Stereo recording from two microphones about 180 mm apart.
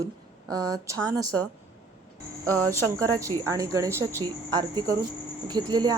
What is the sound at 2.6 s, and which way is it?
Speech, 15° right (ahead or behind).